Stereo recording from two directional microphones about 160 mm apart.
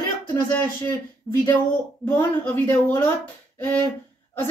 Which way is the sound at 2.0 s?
10° left (ahead or behind).